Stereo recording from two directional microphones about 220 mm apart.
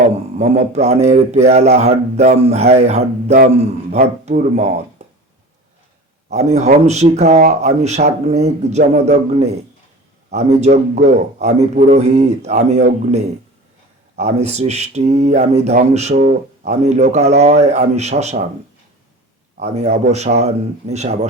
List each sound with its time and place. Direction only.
0.0 s a man's voice: 30° right (ahead or behind)
5.0 s a sound: 30° right (ahead or behind)
6.3 s speech: 30° right (ahead or behind)
7.4 s speech: 45° right (ahead or behind)
7.8 s a man's voice: 30° right (ahead or behind)
14.2 s a man's voice: 30° right (ahead or behind)
19.5 s a man's voice: 30° right (ahead or behind)